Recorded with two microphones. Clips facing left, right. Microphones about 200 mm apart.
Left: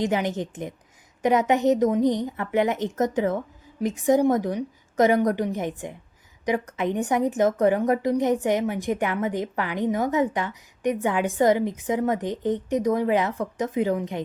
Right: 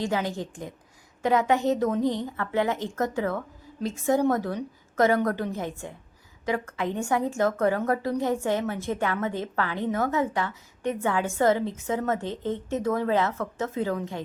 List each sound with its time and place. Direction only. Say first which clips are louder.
0.0 s a woman's voice: left 3 dB; 20° left (ahead or behind)